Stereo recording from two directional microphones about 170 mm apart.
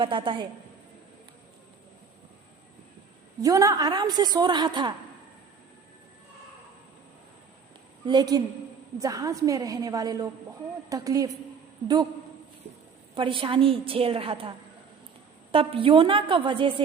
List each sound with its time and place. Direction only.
0.0 s a woman's voice: 30° right (ahead or behind)
3.4 s a woman's voice: 20° right (ahead or behind)
8.0 s a woman's voice: 25° right (ahead or behind)
13.1 s a woman's voice: 30° right (ahead or behind)
15.5 s a woman's voice: 30° right (ahead or behind)